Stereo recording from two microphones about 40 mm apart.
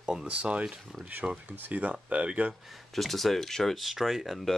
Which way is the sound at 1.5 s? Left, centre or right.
Right.